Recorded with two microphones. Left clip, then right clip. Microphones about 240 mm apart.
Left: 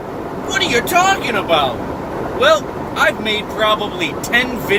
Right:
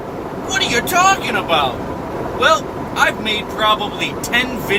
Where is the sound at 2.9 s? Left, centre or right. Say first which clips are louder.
Left 1 dB; right.